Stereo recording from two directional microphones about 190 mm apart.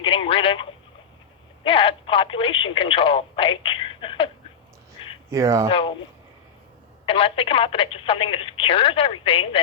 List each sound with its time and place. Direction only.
0.0 s telephone: 30° left (ahead or behind)
1.6 s speech: 30° left (ahead or behind)
5.3 s speech: 15° right (ahead or behind)
5.7 s speech: 25° left (ahead or behind)
7.0 s speech: 30° left (ahead or behind)